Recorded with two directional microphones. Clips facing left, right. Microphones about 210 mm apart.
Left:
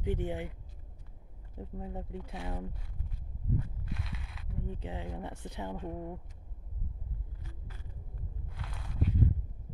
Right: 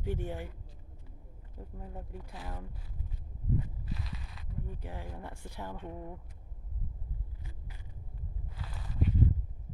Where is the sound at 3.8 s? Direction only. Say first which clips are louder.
Even; centre (ahead or behind).